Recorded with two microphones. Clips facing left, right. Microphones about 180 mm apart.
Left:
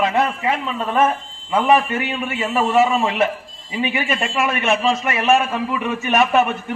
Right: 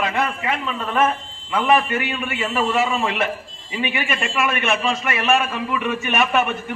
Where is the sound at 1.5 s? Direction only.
35° left (ahead or behind).